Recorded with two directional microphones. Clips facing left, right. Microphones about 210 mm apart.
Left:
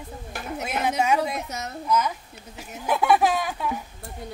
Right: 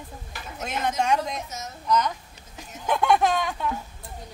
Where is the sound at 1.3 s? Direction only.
65° left (ahead or behind).